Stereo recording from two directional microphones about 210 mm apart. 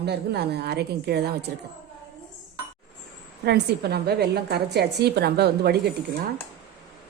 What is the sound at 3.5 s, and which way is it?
A woman's voice, 50° right (ahead or behind).